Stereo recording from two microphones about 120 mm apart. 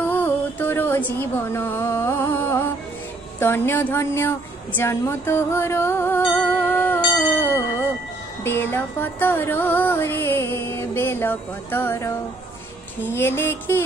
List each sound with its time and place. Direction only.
0.0 s music: 15° left (ahead or behind)
3.3 s a woman's voice: 20° left (ahead or behind)
8.5 s music: 20° left (ahead or behind)